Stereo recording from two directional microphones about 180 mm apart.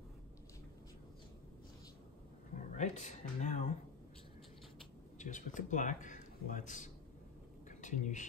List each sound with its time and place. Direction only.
2.5 s speech: 40° left (ahead or behind)
5.2 s a man's voice: 45° left (ahead or behind)